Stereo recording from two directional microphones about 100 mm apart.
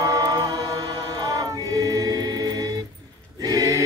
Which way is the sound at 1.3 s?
35° right (ahead or behind).